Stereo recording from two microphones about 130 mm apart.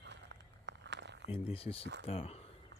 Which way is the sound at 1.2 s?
45° left (ahead or behind).